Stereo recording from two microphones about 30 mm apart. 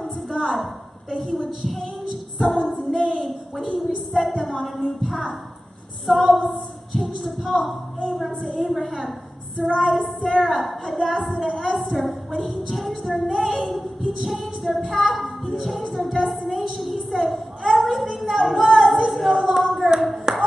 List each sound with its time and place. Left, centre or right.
0.3 s a woman's voice: centre
15.9 s a sound: centre
19.6 s speech: centre
20.3 s clapping: right